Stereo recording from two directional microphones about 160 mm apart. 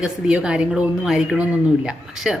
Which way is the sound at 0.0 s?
5° right (ahead or behind).